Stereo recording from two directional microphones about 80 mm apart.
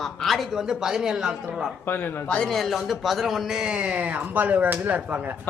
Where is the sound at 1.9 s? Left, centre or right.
Left.